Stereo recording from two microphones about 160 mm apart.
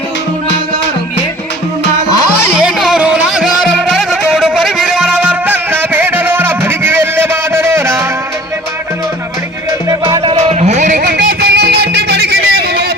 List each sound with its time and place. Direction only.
2.6 s music: centre (ahead or behind)
9.9 s music: 25° right (ahead or behind)
10.3 s music: 45° right (ahead or behind)
11.0 s music: 75° right (ahead or behind)